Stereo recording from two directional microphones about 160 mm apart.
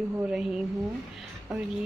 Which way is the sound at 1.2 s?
10° right (ahead or behind).